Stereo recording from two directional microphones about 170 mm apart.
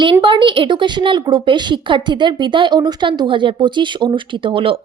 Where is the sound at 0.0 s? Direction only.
30° right (ahead or behind).